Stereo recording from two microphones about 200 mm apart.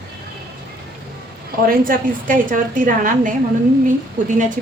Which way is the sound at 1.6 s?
45° right (ahead or behind).